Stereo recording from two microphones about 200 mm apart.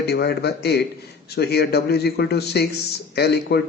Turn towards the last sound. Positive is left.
turn(degrees=55)  # may be behind; listen again after turning